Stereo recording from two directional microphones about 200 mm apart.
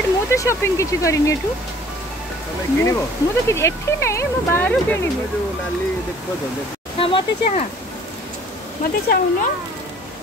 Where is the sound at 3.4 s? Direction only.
15° left (ahead or behind).